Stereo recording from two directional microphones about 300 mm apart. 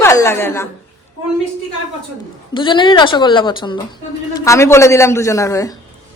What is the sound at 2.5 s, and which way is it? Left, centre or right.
A woman's voice, centre.